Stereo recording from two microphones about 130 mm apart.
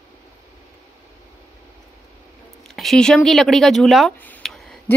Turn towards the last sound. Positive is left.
turn(degrees=0)  # may be behind; listen again after turning